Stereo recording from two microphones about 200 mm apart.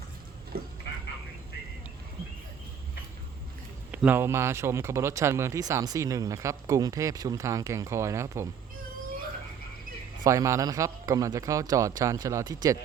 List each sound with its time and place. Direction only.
0.5 s frog: 50° right (ahead or behind)
3.9 s speech: 10° right (ahead or behind)
10.2 s speech: 15° right (ahead or behind)